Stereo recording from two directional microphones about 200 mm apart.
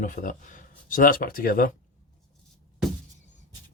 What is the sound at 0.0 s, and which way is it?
Speech, 40° left (ahead or behind).